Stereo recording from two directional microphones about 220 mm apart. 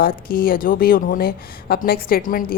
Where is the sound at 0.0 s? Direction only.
40° left (ahead or behind).